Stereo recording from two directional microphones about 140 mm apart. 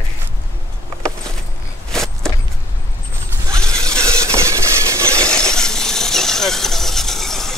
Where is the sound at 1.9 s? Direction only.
5° left (ahead or behind).